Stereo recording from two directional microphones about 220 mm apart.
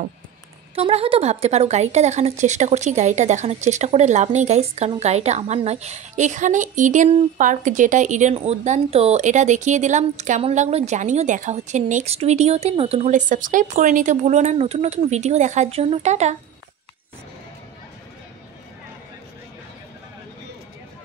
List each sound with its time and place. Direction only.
0.7 s a woman's voice: 25° right (ahead or behind)